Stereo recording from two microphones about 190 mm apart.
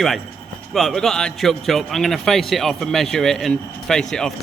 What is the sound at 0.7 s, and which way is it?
A man's voice, centre (ahead or behind).